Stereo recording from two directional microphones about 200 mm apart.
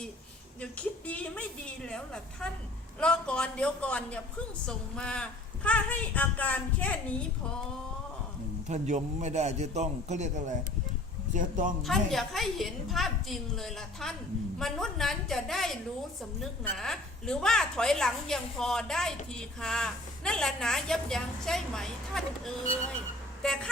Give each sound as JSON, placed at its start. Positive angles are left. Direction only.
{"t": 0.6, "sound": "a woman's voice", "side_deg": 5}
{"t": 8.6, "sound": "a man's voice", "side_deg": -35}
{"t": 11.8, "sound": "a woman's voice", "side_deg": 0}